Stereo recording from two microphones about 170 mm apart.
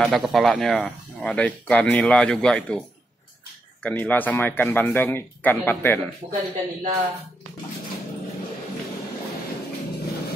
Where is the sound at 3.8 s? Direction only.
10° left (ahead or behind).